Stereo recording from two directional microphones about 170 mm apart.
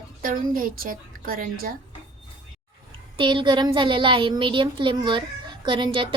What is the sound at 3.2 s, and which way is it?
Speech, 30° right (ahead or behind).